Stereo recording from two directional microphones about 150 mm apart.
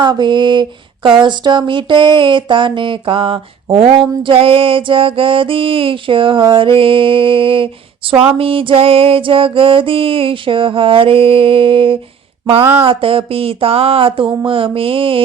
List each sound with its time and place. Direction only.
0.0 s music: 30° right (ahead or behind)